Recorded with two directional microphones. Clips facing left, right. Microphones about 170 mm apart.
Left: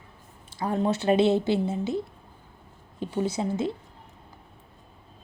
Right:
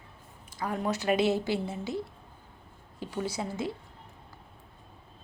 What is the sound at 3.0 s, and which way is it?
Speech, 20° left (ahead or behind).